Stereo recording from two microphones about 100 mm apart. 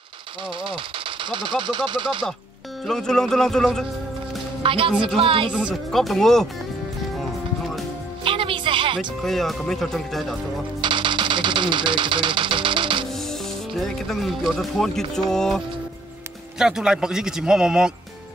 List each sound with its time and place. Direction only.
0.7 s speech: 60° right (ahead or behind)
2.9 s speech: 5° left (ahead or behind)
4.6 s a woman's voice: 65° right (ahead or behind)
5.5 s speech: 10° right (ahead or behind)
5.9 s speech: centre (ahead or behind)
8.2 s music: 60° right (ahead or behind)
9.2 s speech: centre (ahead or behind)
10.8 s a sound: 55° right (ahead or behind)
13.1 s speech: 5° left (ahead or behind)